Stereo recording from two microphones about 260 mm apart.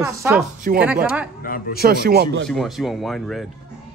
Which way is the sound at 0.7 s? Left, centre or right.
Right.